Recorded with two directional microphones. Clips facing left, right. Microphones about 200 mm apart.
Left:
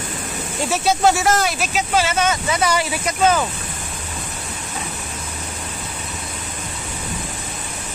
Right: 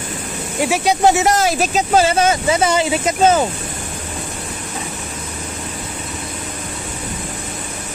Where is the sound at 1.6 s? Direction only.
40° right (ahead or behind).